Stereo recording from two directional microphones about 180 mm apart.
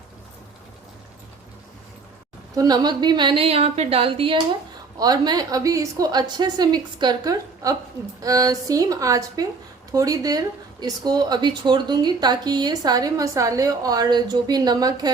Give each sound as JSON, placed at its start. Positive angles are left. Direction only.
{"t": 2.6, "sound": "a woman's voice", "side_deg": -20}